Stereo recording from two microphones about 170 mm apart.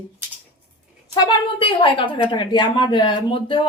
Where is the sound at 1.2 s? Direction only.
30° left (ahead or behind).